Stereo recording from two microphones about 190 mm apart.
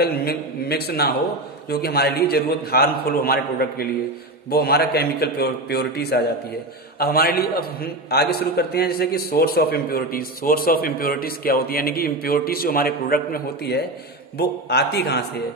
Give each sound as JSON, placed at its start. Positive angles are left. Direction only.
{"t": 0.0, "sound": "a man's voice", "side_deg": 55}